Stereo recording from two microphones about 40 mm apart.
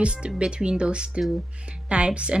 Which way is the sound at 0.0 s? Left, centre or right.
Right.